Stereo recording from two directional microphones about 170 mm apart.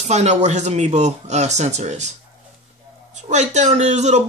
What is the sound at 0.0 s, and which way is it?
Speech, 40° right (ahead or behind).